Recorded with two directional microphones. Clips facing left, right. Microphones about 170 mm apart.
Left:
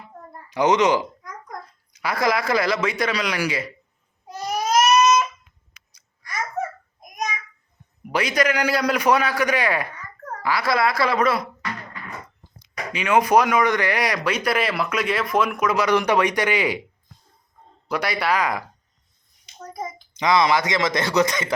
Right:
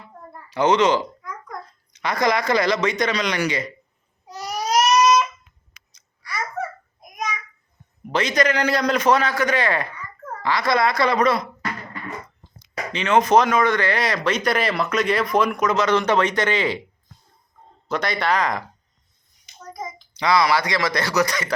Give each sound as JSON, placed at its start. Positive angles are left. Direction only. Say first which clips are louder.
{"t": 0.5, "sound": "speech", "louder": "even", "side_deg": 15}
{"t": 4.8, "sound": "crying", "louder": "even", "side_deg": 50}
{"t": 6.2, "sound": "babbling", "louder": "left 1 dB", "side_deg": 45}
{"t": 8.1, "sound": "speech", "louder": "right 1 dB", "side_deg": 10}
{"t": 12.9, "sound": "speech", "louder": "right 1 dB", "side_deg": 10}
{"t": 17.8, "sound": "speech", "louder": "right 1 dB", "side_deg": 10}
{"t": 19.8, "sound": "speech", "louder": "left 1 dB", "side_deg": 20}